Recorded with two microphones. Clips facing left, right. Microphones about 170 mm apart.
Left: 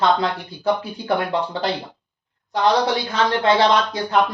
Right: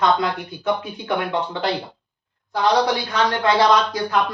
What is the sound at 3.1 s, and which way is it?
Speech, 25° left (ahead or behind).